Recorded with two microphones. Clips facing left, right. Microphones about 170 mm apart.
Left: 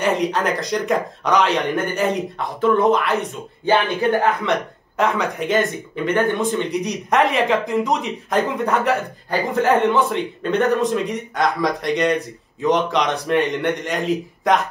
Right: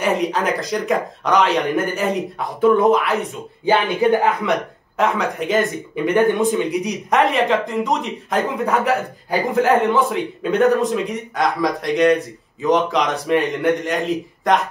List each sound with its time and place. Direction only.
0.0 s speech: centre (ahead or behind)
5.9 s speech: 15° right (ahead or behind)